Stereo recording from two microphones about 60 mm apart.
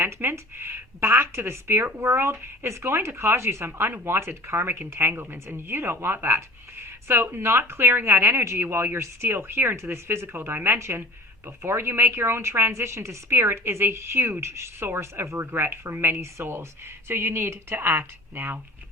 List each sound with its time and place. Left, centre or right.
0.0 s a woman's voice: right